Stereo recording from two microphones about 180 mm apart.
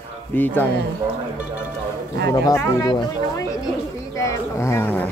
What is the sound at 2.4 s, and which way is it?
Speech, 20° left (ahead or behind).